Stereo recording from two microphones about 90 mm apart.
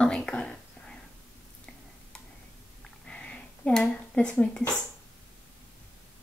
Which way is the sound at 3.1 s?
10° left (ahead or behind).